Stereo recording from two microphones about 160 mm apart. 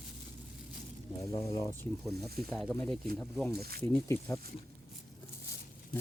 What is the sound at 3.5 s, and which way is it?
Speech, 75° right (ahead or behind).